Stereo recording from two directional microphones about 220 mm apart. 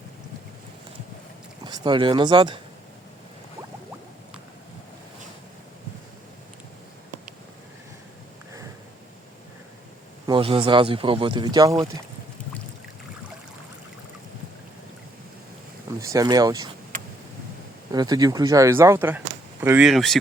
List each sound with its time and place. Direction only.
1.6 s speech: 20° right (ahead or behind)
10.2 s speech: 25° right (ahead or behind)
16.0 s speech: 15° right (ahead or behind)
17.9 s speech: 15° right (ahead or behind); by 20.1 s centre (ahead or behind)